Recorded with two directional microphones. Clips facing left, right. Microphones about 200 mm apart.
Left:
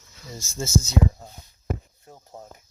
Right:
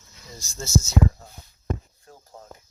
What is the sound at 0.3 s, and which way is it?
Speech, 50° left (ahead or behind).